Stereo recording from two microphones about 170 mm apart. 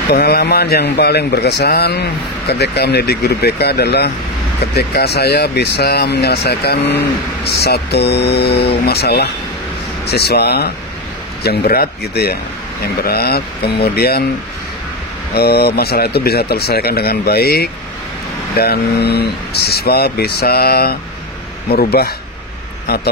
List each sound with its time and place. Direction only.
0.1 s speech: 65° left (ahead or behind)
15.3 s speech: 65° left (ahead or behind)